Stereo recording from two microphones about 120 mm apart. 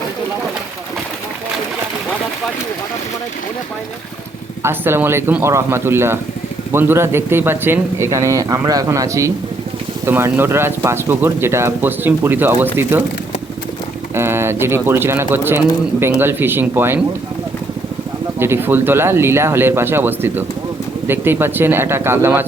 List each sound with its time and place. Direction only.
4.6 s speech: 20° right (ahead or behind)
14.2 s speech: 20° right (ahead or behind)
18.3 s speech: 20° right (ahead or behind)